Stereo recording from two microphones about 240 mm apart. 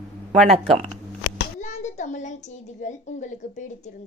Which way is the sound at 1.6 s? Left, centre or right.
Left.